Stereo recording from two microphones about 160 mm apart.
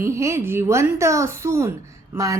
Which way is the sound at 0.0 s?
20° right (ahead or behind).